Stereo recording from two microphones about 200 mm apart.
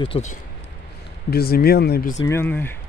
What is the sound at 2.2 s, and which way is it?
Speech, 10° left (ahead or behind).